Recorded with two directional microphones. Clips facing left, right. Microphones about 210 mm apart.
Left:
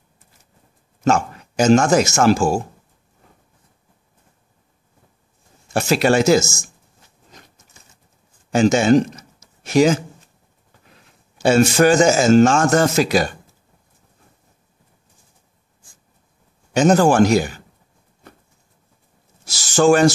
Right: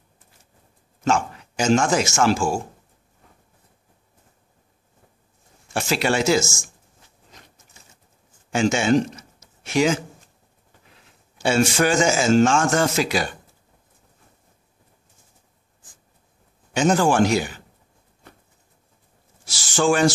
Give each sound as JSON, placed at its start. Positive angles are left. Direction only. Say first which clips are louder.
{"t": 1.0, "sound": "speech", "louder": "left 4 dB", "side_deg": 40}
{"t": 5.7, "sound": "a man's voice", "louder": "left 6 dB", "side_deg": 40}
{"t": 8.5, "sound": "a man's voice", "louder": "left 5 dB", "side_deg": 40}
{"t": 11.3, "sound": "a man's voice", "louder": "left 5 dB", "side_deg": 40}
{"t": 16.7, "sound": "a man's voice", "louder": "left 5 dB", "side_deg": 40}
{"t": 19.4, "sound": "a sound", "louder": "left 6 dB", "side_deg": 40}